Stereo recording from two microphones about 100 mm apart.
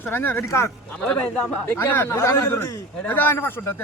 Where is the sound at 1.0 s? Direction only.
10° left (ahead or behind).